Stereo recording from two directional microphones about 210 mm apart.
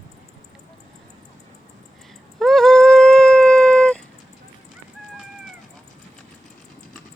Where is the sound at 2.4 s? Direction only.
Centre (ahead or behind).